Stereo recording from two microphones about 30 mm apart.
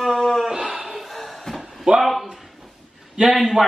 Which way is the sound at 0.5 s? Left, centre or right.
Centre.